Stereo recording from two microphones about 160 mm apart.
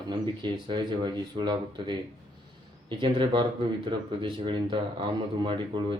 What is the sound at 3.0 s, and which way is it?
Speech, 30° right (ahead or behind).